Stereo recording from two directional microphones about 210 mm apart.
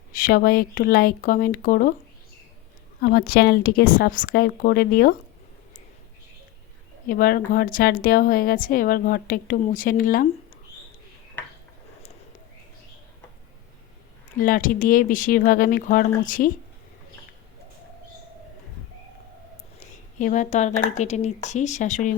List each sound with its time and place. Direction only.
0.1 s a woman's voice: 40° left (ahead or behind)
3.0 s a woman's voice: 45° left (ahead or behind)
7.1 s a woman's voice: 45° left (ahead or behind)
14.3 s a woman's voice: 40° left (ahead or behind)
19.8 s a woman's voice: 35° left (ahead or behind)